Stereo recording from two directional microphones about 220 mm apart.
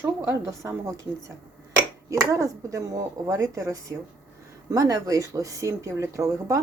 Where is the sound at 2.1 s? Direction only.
15° right (ahead or behind).